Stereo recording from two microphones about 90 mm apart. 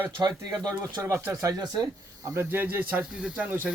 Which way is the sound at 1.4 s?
40° right (ahead or behind).